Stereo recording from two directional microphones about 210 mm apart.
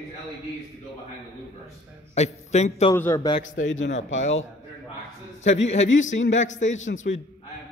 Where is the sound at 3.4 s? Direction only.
70° left (ahead or behind).